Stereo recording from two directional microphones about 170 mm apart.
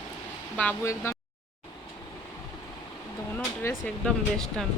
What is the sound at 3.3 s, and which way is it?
Air conditioning, 10° left (ahead or behind).